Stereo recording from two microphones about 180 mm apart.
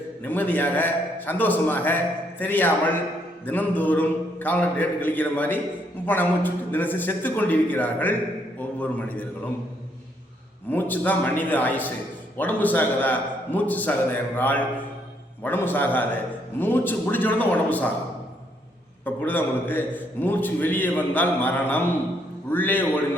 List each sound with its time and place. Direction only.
0.2 s a man's voice: 10° left (ahead or behind)
10.7 s a man's voice: 10° left (ahead or behind)
19.0 s a man's voice: 10° left (ahead or behind)